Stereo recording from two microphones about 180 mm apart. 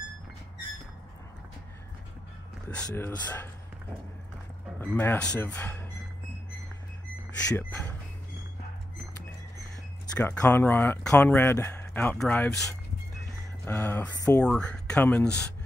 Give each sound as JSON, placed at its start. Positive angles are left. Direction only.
{"t": 2.7, "sound": "speech", "side_deg": 5}
{"t": 4.7, "sound": "speech", "side_deg": 10}
{"t": 7.4, "sound": "speech", "side_deg": 15}
{"t": 10.1, "sound": "speech", "side_deg": 15}
{"t": 14.1, "sound": "speech", "side_deg": 20}
{"t": 14.4, "sound": "speech", "side_deg": 5}